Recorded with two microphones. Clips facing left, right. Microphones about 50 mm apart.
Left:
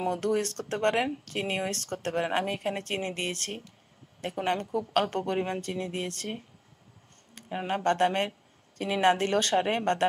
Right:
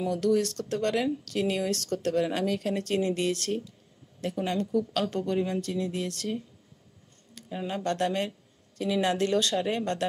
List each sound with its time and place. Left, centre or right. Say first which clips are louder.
0.0 s speech: right 2 dB; left